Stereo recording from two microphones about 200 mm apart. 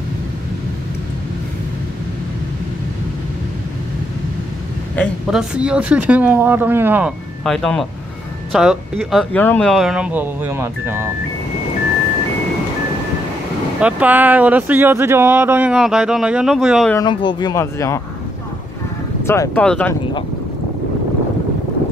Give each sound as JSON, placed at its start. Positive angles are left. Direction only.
{"t": 4.9, "sound": "a woman's voice", "side_deg": 5}
{"t": 5.5, "sound": "speech", "side_deg": -5}
{"t": 13.7, "sound": "speech", "side_deg": -5}
{"t": 16.9, "sound": "speech", "side_deg": 20}
{"t": 19.2, "sound": "speech", "side_deg": 15}